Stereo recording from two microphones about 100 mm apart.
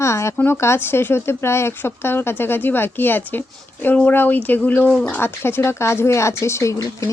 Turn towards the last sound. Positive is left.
turn(degrees=35)  # may be behind; listen again after turning